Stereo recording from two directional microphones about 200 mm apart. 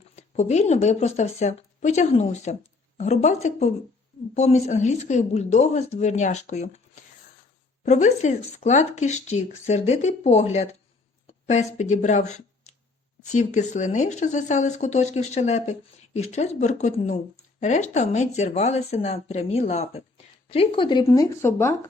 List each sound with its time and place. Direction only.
0.2 s speech: 35° left (ahead or behind)
7.9 s speech: 35° left (ahead or behind); by 21.8 s 15° left (ahead or behind)